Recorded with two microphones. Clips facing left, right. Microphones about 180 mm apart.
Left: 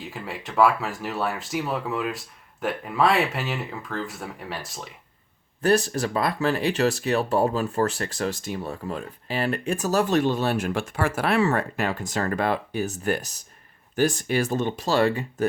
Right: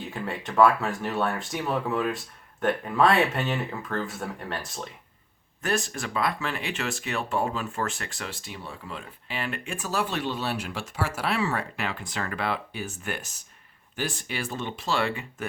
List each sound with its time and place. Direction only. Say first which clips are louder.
0.0 s speech: right 2 dB; 5° left (ahead or behind)
5.6 s speech: left 8 dB; 35° left (ahead or behind)